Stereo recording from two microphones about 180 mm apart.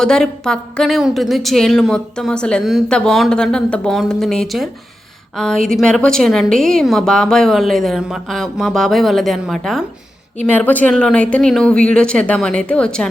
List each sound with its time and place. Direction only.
0.0 s a woman's voice: 5° left (ahead or behind)